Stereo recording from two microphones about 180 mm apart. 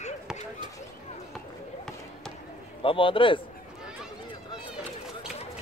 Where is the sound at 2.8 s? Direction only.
30° left (ahead or behind).